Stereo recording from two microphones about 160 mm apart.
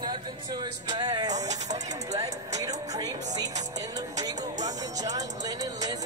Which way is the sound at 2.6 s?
20° right (ahead or behind).